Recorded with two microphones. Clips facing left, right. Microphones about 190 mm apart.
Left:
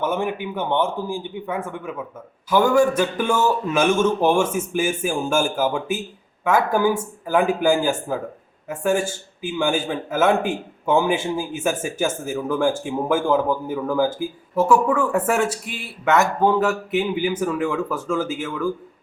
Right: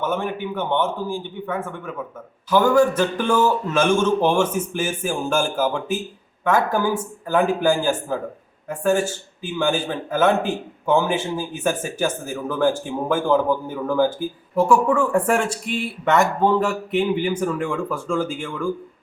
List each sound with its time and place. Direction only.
0.0 s a man's voice: 15° left (ahead or behind)